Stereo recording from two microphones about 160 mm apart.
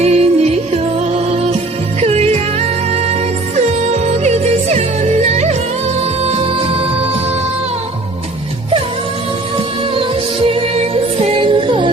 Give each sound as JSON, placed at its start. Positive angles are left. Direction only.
{"t": 0.0, "sound": "music", "side_deg": -40}
{"t": 9.9, "sound": "music", "side_deg": -35}